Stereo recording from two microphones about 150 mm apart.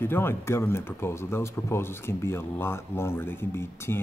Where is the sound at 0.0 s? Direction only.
15° left (ahead or behind).